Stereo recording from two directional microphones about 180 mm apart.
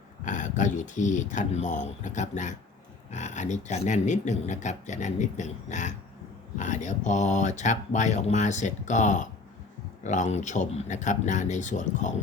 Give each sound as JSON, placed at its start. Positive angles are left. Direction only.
{"t": 0.3, "sound": "speech", "side_deg": 45}